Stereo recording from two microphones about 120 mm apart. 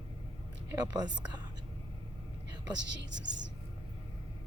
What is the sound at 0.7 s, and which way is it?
Speech, 35° right (ahead or behind).